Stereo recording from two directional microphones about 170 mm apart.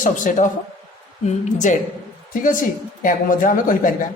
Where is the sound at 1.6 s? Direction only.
45° left (ahead or behind).